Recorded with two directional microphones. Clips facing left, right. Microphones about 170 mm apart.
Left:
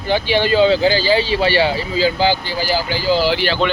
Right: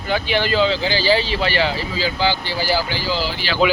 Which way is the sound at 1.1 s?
25° left (ahead or behind).